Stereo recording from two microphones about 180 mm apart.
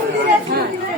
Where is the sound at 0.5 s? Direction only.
60° right (ahead or behind).